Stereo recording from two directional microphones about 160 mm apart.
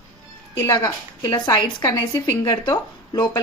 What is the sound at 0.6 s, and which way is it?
A woman's voice, 20° left (ahead or behind).